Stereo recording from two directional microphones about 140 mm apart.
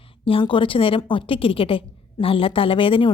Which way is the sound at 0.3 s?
40° left (ahead or behind).